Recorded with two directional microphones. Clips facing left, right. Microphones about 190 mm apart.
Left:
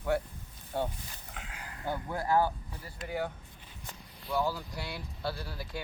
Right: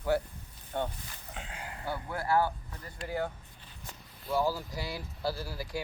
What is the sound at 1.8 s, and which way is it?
Speech, 20° left (ahead or behind).